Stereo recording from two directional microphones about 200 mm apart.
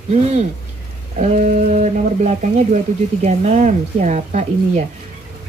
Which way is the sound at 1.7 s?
35° right (ahead or behind).